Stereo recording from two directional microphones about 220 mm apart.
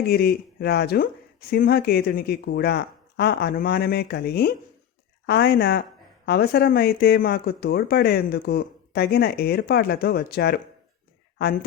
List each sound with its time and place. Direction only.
0.0 s speech: 45° left (ahead or behind)